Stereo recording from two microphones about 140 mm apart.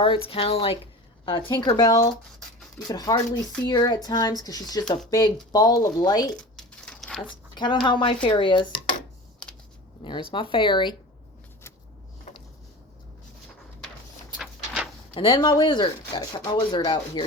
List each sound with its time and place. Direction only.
0.0 s speech: 40° left (ahead or behind)
6.3 s a sound: 5° left (ahead or behind)
7.5 s speech: 35° left (ahead or behind)
10.0 s speech: 35° left (ahead or behind)
14.3 s a sound: 5° right (ahead or behind)
15.1 s speech: 35° left (ahead or behind)